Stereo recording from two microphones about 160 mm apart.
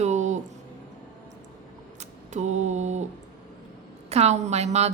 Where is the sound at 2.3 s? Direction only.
45° right (ahead or behind).